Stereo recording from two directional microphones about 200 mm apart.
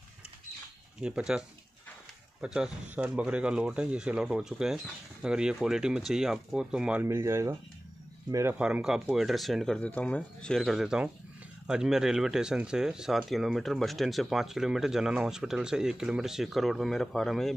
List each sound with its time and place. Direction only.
1.0 s speech: 5° right (ahead or behind)
2.4 s speech: 5° right (ahead or behind)